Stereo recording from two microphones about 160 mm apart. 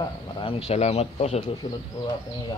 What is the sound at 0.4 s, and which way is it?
Speech, 35° left (ahead or behind).